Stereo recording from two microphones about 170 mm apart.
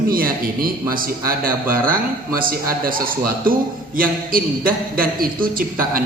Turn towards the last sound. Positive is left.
turn(degrees=-55)  # may be behind; listen again after turning